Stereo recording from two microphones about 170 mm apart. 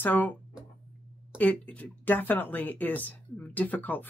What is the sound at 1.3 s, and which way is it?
Speech, 10° left (ahead or behind).